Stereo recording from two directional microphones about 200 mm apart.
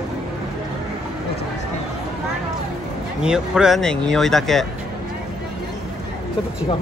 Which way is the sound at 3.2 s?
5° right (ahead or behind).